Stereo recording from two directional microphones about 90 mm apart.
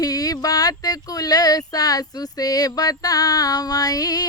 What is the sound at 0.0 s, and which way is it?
Speech, 45° left (ahead or behind).